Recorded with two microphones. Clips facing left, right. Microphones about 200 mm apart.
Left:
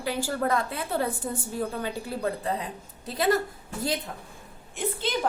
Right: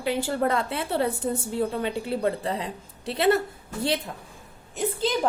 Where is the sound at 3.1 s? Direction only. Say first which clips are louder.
Right 3 dB; 25° right (ahead or behind).